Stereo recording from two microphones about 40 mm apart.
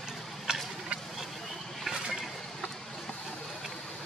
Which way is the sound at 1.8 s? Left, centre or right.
Centre.